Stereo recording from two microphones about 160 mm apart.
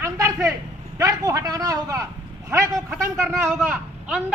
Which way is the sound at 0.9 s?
20° right (ahead or behind).